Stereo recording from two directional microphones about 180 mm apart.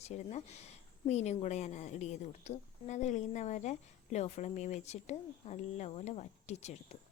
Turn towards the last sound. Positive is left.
turn(degrees=35)  # may be behind; listen again after turning